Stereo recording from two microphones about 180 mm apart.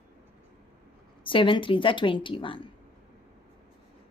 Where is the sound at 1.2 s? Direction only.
30° left (ahead or behind).